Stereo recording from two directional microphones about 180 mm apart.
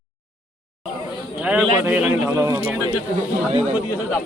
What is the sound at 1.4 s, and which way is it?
A man's voice, 5° right (ahead or behind).